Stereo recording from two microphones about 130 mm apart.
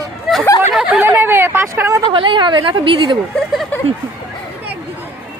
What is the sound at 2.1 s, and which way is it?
Speech, 40° right (ahead or behind).